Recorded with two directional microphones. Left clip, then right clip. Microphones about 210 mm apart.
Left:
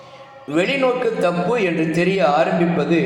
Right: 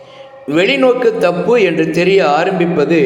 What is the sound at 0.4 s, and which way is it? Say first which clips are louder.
A man's voice: right 7 dB; 20° right (ahead or behind).